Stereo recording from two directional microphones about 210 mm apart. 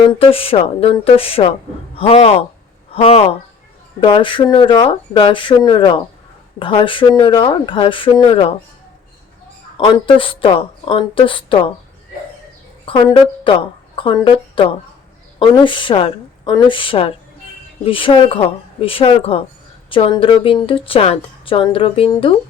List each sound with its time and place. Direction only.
0.1 s a woman's voice: 25° left (ahead or behind)
9.7 s a woman's voice: 25° left (ahead or behind)
12.8 s a woman's voice: 25° left (ahead or behind)